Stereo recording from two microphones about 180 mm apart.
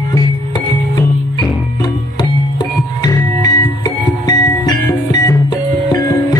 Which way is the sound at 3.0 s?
20° left (ahead or behind).